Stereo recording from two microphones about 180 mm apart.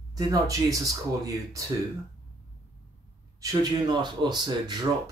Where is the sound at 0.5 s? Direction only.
20° right (ahead or behind).